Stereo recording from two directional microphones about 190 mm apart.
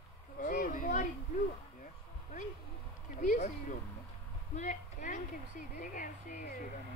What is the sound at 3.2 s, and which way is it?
Speech, 40° left (ahead or behind).